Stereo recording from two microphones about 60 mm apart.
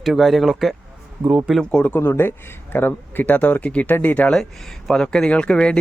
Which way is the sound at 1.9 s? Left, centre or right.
Left.